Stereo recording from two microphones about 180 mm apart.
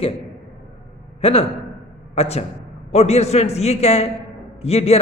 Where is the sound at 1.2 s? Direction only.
30° left (ahead or behind).